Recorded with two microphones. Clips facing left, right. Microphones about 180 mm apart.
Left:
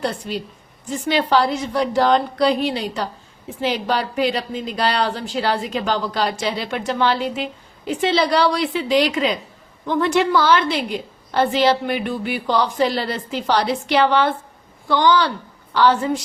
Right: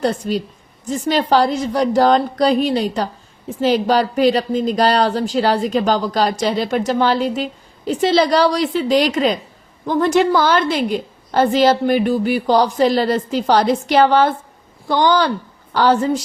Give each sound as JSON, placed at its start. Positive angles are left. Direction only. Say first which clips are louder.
{"t": 0.0, "sound": "a woman's voice", "louder": "right 6 dB", "side_deg": -45}